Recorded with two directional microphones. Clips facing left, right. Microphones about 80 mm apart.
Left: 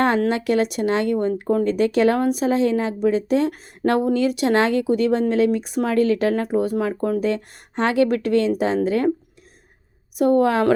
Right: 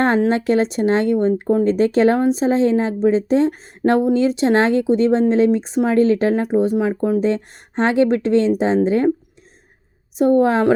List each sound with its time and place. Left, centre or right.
0.3 s a woman's voice: right
10.2 s a woman's voice: right